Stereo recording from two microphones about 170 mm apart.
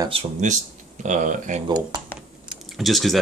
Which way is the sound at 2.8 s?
Centre (ahead or behind).